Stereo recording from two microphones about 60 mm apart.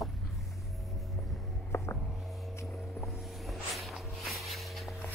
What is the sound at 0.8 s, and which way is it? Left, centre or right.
Vehicle, centre.